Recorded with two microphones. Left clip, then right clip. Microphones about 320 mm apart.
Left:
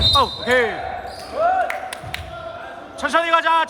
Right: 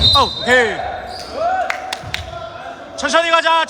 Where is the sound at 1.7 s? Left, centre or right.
Right.